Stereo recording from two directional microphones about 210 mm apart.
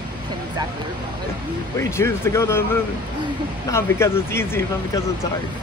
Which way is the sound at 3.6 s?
10° left (ahead or behind).